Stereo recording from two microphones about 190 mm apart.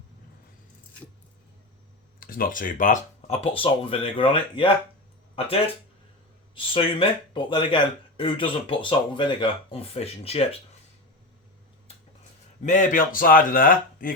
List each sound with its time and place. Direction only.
2.2 s speech: 50° left (ahead or behind); by 4.7 s 25° left (ahead or behind)
6.5 s speech: 25° left (ahead or behind)
12.6 s a man's voice: 40° left (ahead or behind)